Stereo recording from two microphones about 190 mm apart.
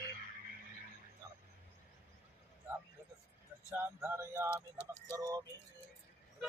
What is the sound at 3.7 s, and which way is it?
Speech, 10° right (ahead or behind).